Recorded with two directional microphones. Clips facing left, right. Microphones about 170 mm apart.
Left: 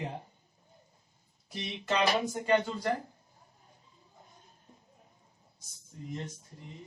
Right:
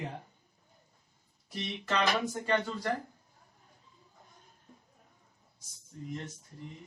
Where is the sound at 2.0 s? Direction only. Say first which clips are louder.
Left 2 dB; 30° left (ahead or behind).